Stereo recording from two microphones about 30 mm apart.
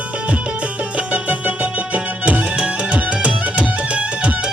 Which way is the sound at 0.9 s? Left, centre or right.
Right.